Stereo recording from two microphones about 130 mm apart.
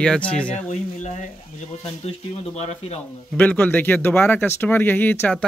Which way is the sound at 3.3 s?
15° left (ahead or behind).